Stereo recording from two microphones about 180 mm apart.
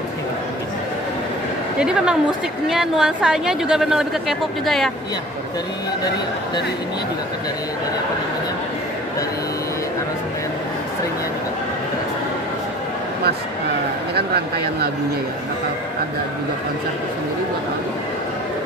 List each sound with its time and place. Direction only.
1.8 s a woman's voice: 5° right (ahead or behind)
14.1 s speech: 60° right (ahead or behind)